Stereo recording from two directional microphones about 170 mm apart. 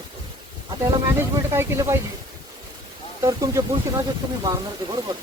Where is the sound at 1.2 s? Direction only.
15° right (ahead or behind).